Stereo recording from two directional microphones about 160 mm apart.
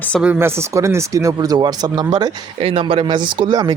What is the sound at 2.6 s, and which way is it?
Speech, 35° right (ahead or behind).